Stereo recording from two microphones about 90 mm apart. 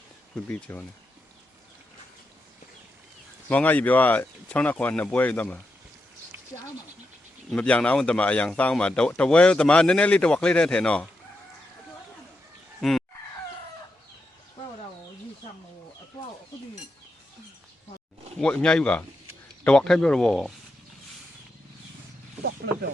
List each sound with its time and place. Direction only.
0.4 s speech: 20° left (ahead or behind)
3.5 s speech: 15° left (ahead or behind)
7.5 s speech: 15° left (ahead or behind)
12.8 s fowl: centre (ahead or behind)
18.3 s speech: 10° left (ahead or behind)